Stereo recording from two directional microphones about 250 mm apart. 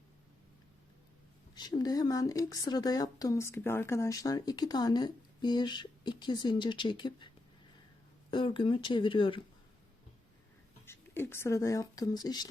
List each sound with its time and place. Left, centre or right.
1.5 s speech: centre
8.3 s speech: centre
10.8 s speech: centre